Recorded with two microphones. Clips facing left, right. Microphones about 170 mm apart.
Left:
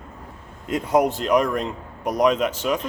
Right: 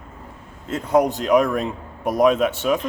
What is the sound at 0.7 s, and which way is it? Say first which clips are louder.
Speech: right 1 dB; 10° left (ahead or behind).